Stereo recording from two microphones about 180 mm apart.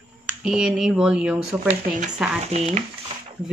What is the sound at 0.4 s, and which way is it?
A woman's voice, 5° right (ahead or behind).